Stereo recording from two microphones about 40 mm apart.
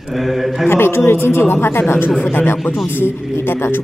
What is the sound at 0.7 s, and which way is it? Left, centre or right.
Speech, left.